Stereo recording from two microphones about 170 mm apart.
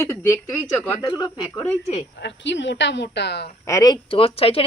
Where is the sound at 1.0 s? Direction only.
25° left (ahead or behind).